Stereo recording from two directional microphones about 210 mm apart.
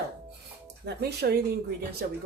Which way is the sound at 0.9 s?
50° right (ahead or behind).